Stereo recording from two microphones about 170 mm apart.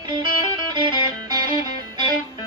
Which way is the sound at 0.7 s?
25° right (ahead or behind).